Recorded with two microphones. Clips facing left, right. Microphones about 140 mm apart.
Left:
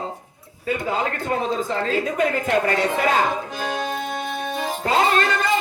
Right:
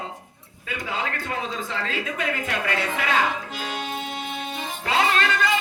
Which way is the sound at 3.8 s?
40° left (ahead or behind).